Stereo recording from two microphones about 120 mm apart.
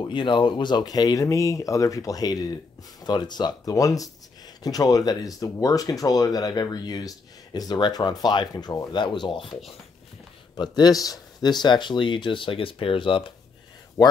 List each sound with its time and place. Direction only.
0.0 s speech: 40° left (ahead or behind)
10.5 s speech: 35° left (ahead or behind)
14.0 s speech: 30° left (ahead or behind)